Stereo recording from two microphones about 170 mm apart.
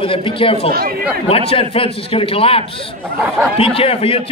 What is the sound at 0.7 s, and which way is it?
Speech, 65° right (ahead or behind).